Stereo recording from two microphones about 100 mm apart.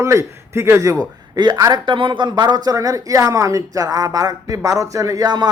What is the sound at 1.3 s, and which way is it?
A man's voice, 45° right (ahead or behind).